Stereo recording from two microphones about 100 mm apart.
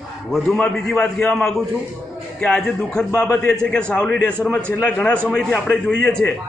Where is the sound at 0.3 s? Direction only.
5° left (ahead or behind).